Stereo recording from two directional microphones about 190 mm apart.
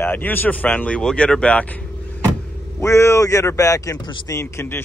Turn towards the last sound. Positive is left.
turn(degrees=15)  # may be behind; listen again after turning